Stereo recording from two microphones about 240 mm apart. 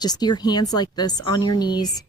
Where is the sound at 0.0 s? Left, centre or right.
Centre.